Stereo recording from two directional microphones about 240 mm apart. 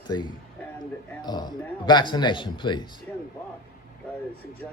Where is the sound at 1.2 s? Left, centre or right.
Centre.